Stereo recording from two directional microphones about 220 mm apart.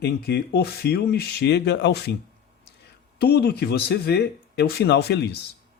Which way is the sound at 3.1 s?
45° left (ahead or behind).